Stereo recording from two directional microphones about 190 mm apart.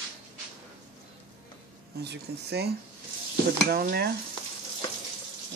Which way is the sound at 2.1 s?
60° right (ahead or behind).